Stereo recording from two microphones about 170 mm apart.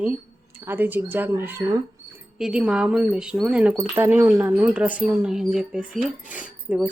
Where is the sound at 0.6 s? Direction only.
10° right (ahead or behind).